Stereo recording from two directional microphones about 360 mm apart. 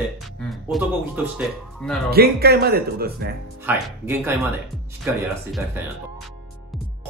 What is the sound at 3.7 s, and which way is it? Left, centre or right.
Speech, centre.